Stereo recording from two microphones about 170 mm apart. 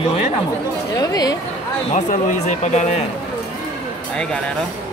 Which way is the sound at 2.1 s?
45° left (ahead or behind).